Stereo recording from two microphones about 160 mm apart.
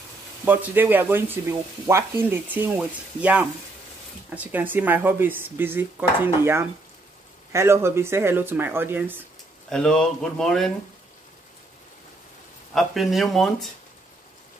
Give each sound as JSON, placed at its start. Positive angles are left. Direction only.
{"t": 0.5, "sound": "speech", "side_deg": -10}
{"t": 9.7, "sound": "speech", "side_deg": 5}
{"t": 12.7, "sound": "speech", "side_deg": 0}